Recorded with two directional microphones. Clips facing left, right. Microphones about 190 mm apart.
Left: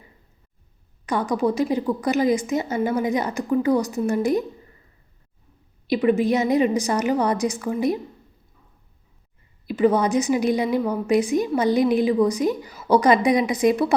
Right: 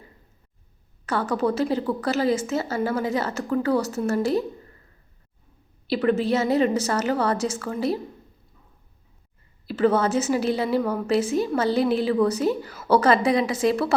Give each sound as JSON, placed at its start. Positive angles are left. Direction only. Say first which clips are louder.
{"t": 1.0, "sound": "a woman's voice", "louder": "left 2 dB", "side_deg": 15}
{"t": 5.9, "sound": "a woman's voice", "louder": "left 2 dB", "side_deg": 15}
{"t": 9.6, "sound": "a woman's voice", "louder": "left 2 dB", "side_deg": 15}